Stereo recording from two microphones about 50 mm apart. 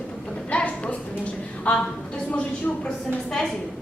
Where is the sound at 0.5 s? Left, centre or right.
Left.